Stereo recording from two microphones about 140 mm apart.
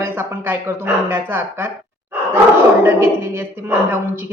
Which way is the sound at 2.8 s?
15° right (ahead or behind).